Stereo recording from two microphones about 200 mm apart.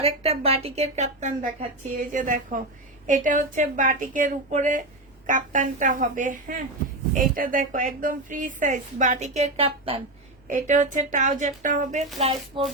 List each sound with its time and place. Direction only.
0.0 s a woman's voice: 30° right (ahead or behind)
10.5 s a woman's voice: 40° right (ahead or behind)
12.5 s music: 25° right (ahead or behind)